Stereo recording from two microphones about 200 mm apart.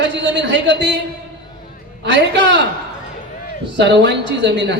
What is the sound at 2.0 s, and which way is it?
Speech, 60° right (ahead or behind).